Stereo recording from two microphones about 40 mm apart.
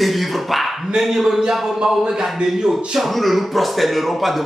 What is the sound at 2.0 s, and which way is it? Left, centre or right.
Speech, centre.